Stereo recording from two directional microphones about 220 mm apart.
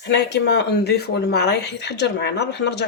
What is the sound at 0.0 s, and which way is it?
Speech, 50° left (ahead or behind).